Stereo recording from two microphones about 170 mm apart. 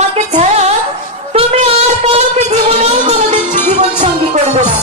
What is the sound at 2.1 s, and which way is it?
Music, 40° right (ahead or behind).